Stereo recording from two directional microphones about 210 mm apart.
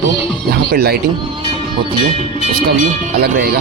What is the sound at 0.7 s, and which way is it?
Speech, 50° right (ahead or behind).